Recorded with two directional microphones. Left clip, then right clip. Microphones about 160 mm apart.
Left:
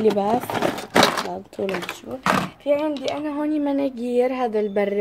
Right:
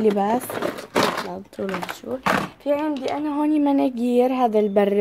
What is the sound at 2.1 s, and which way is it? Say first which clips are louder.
Speech: right 4 dB; 35° right (ahead or behind).